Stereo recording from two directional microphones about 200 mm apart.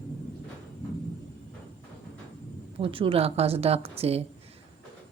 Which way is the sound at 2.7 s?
25° right (ahead or behind).